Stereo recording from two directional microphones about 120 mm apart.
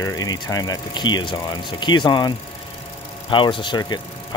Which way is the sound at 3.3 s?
45° left (ahead or behind).